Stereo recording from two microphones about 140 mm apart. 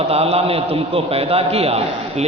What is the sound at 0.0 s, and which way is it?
A man's voice, 45° right (ahead or behind).